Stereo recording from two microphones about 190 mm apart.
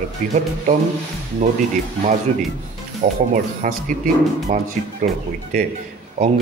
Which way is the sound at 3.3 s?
40° right (ahead or behind).